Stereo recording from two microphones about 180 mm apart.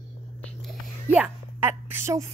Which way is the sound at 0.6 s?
10° right (ahead or behind).